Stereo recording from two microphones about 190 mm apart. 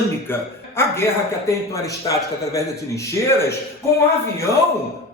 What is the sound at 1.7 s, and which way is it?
Speech, 15° left (ahead or behind).